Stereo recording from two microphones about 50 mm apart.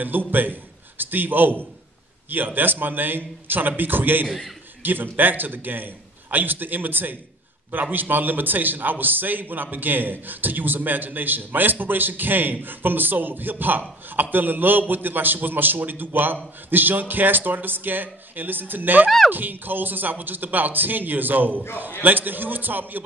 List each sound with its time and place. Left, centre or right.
0.0 s a man's voice: right
19.0 s speech: centre
19.3 s a man's voice: right